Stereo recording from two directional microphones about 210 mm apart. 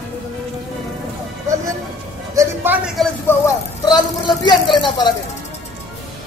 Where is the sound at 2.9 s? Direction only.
10° left (ahead or behind).